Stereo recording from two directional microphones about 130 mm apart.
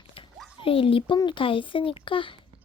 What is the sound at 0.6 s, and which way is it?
A child's voice, 45° left (ahead or behind).